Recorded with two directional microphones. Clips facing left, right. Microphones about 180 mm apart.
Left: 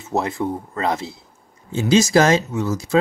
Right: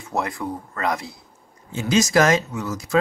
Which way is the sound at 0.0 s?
25° left (ahead or behind).